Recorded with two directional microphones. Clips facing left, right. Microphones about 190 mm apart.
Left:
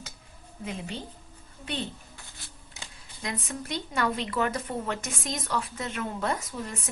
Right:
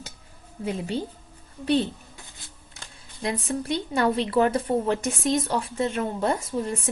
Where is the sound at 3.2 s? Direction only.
30° right (ahead or behind).